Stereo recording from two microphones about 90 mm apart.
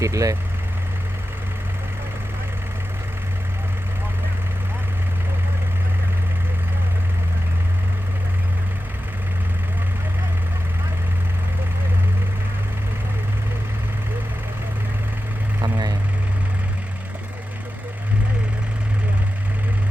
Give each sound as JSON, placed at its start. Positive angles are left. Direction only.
{"t": 0.0, "sound": "speech", "side_deg": -35}
{"t": 15.6, "sound": "vehicle", "side_deg": -50}